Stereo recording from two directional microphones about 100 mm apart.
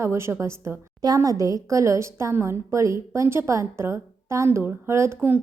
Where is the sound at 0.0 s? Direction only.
25° right (ahead or behind).